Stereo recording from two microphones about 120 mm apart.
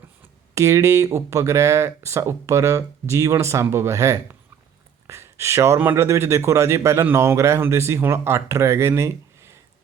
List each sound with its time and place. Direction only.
0.5 s speech: 25° right (ahead or behind)